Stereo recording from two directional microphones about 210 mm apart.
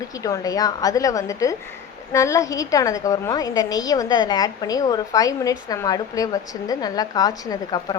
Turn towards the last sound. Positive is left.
turn(degrees=20)  # may be behind; listen again after turning